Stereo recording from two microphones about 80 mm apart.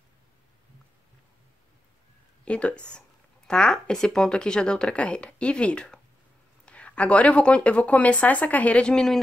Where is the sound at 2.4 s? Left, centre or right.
Centre.